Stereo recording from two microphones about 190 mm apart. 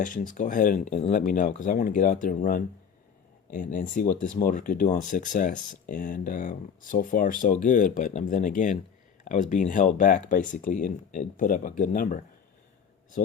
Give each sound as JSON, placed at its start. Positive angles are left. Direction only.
{"t": 0.0, "sound": "speech", "side_deg": 45}